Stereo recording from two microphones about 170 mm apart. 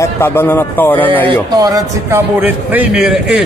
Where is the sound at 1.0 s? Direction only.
30° right (ahead or behind); by 3.2 s 5° right (ahead or behind).